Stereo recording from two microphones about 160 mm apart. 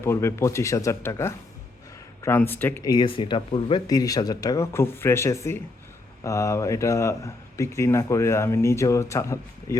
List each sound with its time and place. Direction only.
0.0 s speech: 15° left (ahead or behind)
2.9 s speech: 30° left (ahead or behind)